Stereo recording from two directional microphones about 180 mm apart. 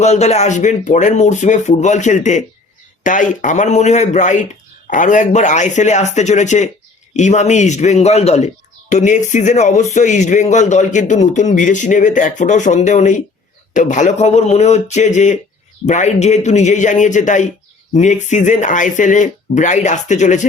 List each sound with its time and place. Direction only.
0.0 s speech: 40° left (ahead or behind)